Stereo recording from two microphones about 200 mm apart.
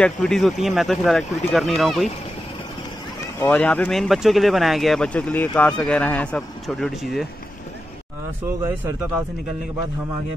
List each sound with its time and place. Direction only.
0.0 s speech: 5° left (ahead or behind)
3.3 s speech: 10° left (ahead or behind)